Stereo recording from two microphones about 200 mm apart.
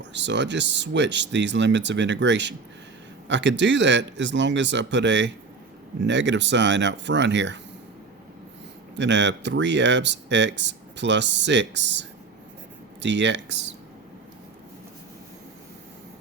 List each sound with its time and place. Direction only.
0.0 s speech: 60° right (ahead or behind)
9.0 s speech: 60° right (ahead or behind)